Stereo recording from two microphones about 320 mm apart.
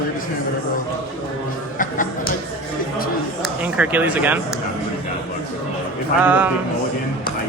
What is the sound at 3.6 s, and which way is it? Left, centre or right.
Speech, centre.